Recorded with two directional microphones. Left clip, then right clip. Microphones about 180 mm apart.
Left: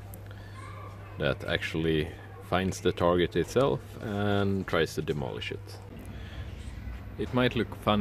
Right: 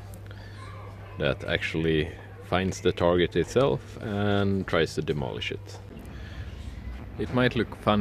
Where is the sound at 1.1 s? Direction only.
5° left (ahead or behind).